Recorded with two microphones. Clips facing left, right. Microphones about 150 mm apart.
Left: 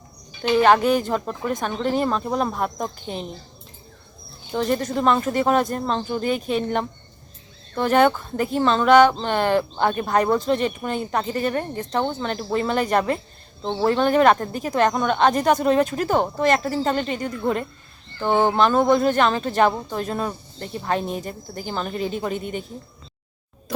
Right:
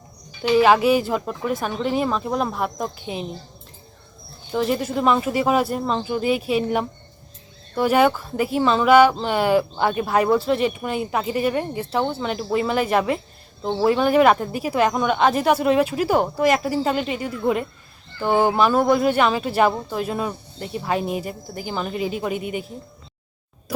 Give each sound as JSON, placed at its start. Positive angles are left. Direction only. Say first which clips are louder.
{"t": 0.4, "sound": "speech", "louder": "right 1 dB", "side_deg": -5}
{"t": 4.5, "sound": "speech", "louder": "even", "side_deg": -5}